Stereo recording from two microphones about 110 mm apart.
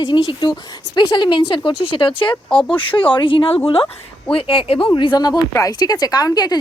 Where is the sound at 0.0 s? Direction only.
45° left (ahead or behind).